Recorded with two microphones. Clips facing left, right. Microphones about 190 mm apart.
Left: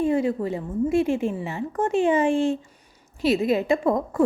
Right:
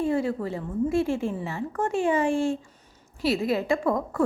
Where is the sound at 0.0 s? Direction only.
20° left (ahead or behind).